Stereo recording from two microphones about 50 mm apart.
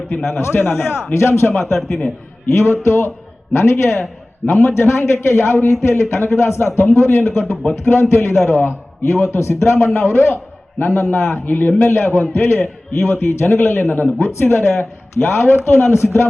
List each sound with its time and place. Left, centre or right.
0.3 s a man's voice: left
12.5 s a man's voice: left